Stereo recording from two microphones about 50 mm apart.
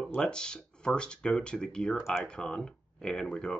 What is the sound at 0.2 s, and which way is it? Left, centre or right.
Speech, centre.